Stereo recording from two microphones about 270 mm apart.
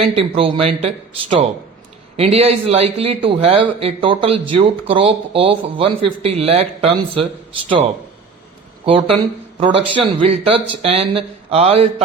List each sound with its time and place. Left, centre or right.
0.0 s a man's voice: centre